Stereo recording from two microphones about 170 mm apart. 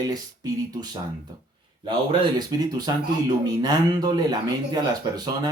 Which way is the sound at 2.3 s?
25° right (ahead or behind).